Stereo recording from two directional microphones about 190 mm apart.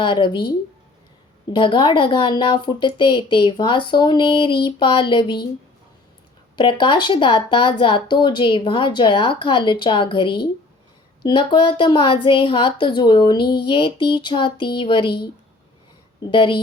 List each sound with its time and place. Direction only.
0.0 s speech: 25° left (ahead or behind)
1.5 s speech: 25° left (ahead or behind)
6.6 s speech: 25° left (ahead or behind)
16.2 s speech: 25° left (ahead or behind)